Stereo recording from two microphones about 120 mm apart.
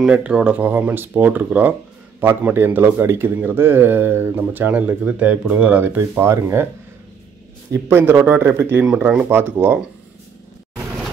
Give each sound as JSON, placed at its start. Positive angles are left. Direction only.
{"t": 0.0, "sound": "speech", "side_deg": -10}
{"t": 7.7, "sound": "speech", "side_deg": -20}